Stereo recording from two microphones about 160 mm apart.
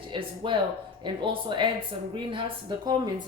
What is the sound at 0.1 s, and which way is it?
Speech, 30° right (ahead or behind).